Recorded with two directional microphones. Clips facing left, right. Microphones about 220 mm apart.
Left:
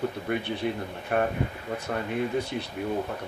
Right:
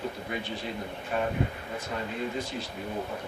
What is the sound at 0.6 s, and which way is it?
Speech, 60° left (ahead or behind).